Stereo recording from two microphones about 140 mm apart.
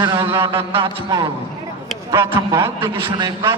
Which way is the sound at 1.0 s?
25° right (ahead or behind).